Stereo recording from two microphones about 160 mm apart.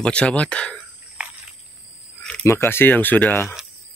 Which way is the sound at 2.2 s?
5° left (ahead or behind).